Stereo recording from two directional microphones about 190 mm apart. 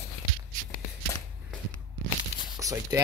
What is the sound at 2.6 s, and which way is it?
Speech, 15° right (ahead or behind).